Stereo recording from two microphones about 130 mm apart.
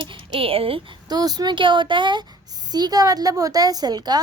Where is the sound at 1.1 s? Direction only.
30° right (ahead or behind).